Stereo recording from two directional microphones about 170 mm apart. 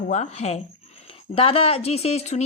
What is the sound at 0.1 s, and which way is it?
Speech, 40° left (ahead or behind).